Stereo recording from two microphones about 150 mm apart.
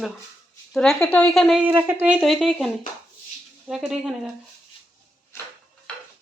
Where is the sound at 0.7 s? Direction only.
5° left (ahead or behind).